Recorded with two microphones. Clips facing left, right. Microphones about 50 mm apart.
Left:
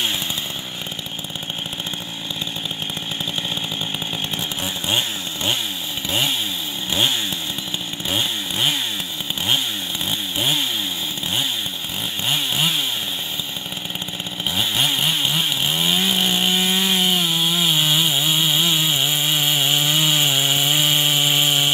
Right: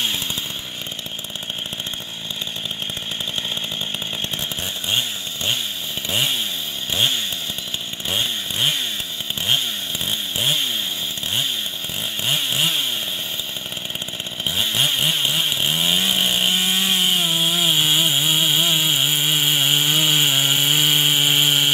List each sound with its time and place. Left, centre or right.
4.8 s chainsaw: centre
6.0 s chainsaw: centre
8.1 s chainsaw: centre
10.0 s chainsaw: centre
12.3 s chainsaw: centre
14.5 s chainsaw: centre